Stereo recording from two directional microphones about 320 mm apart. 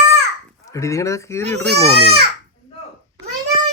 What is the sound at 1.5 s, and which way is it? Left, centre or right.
Speech, right.